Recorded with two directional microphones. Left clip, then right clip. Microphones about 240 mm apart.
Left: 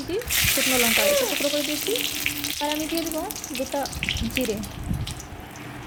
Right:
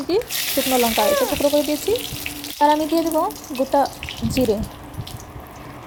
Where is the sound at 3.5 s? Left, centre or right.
Centre.